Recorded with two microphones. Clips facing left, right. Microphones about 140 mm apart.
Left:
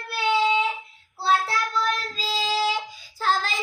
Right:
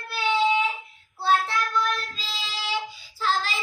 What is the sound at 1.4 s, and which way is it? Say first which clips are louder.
Child singing: even; 35° left (ahead or behind).